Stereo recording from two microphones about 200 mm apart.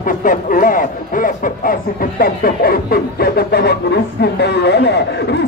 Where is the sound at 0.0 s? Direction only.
45° left (ahead or behind).